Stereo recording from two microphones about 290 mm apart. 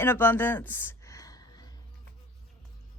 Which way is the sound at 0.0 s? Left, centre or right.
Centre.